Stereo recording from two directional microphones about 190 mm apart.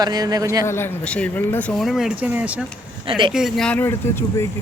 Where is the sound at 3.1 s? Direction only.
25° right (ahead or behind).